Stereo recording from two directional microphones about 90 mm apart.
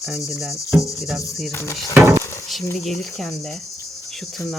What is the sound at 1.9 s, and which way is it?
Dishes, 30° right (ahead or behind).